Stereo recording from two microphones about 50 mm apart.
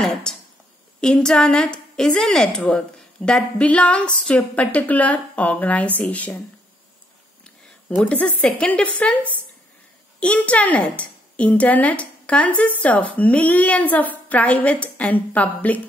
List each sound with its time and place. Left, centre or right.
0.3 s a woman's voice: centre; by 6.4 s left
8.0 s a woman's voice: left